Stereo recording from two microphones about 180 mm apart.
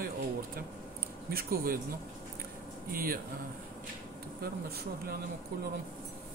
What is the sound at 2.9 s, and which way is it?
Speech, 55° right (ahead or behind).